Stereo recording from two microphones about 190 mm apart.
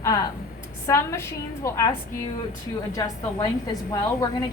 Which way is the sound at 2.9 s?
15° left (ahead or behind).